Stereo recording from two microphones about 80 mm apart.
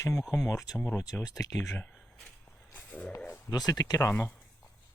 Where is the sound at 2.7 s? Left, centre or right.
Centre.